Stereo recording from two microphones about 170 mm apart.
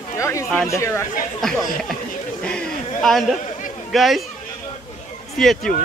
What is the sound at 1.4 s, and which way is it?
Speech, 5° left (ahead or behind).